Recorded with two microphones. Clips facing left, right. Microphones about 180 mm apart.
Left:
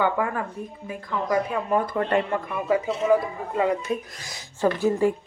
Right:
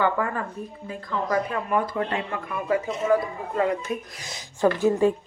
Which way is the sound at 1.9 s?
55° left (ahead or behind).